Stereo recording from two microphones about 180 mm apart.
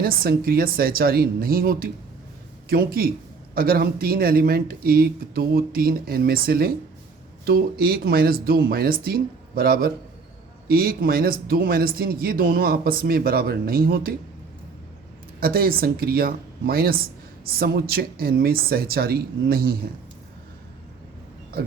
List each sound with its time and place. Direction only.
0.0 s a man's voice: 55° right (ahead or behind)
15.4 s a man's voice: 55° right (ahead or behind)